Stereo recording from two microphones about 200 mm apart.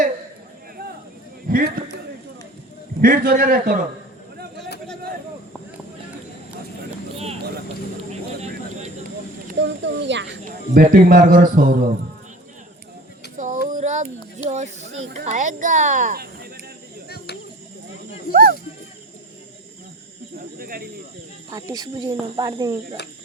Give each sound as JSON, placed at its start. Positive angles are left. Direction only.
{"t": 1.5, "sound": "a man's voice", "side_deg": -45}
{"t": 3.0, "sound": "a man's voice", "side_deg": -45}
{"t": 8.1, "sound": "vehicle", "side_deg": -35}
{"t": 9.6, "sound": "speech", "side_deg": -65}
{"t": 10.4, "sound": "a man's voice", "side_deg": -45}
{"t": 13.3, "sound": "a sound", "side_deg": -40}
{"t": 15.1, "sound": "speech", "side_deg": -35}
{"t": 18.3, "sound": "a sound", "side_deg": -45}
{"t": 20.6, "sound": "speech", "side_deg": -45}
{"t": 21.5, "sound": "speech", "side_deg": -20}